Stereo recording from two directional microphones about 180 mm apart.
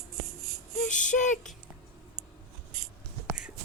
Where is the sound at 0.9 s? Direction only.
45° left (ahead or behind).